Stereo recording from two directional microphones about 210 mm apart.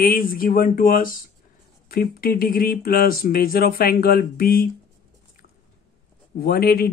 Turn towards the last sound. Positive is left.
turn(degrees=45)  # may be behind; listen again after turning